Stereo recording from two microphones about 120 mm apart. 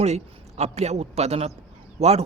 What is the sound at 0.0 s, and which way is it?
A man's voice, 65° right (ahead or behind).